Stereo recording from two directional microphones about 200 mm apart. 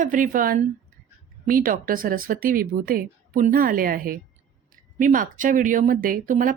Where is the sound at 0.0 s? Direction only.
40° right (ahead or behind).